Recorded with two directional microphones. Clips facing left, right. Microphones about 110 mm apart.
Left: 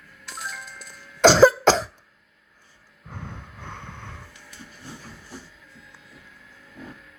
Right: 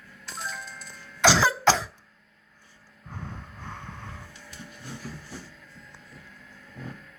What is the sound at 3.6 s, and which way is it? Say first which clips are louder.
Vehicle: left 2 dB; 70° left (ahead or behind).